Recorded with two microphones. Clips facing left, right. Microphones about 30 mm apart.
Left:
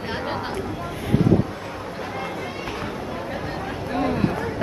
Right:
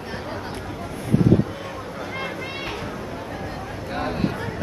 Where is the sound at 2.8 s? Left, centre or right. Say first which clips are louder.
Left 2 dB; left.